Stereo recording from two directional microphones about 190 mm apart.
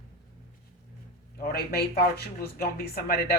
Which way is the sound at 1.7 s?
55° left (ahead or behind).